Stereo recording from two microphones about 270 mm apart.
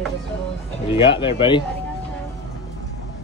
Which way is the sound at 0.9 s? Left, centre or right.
Centre.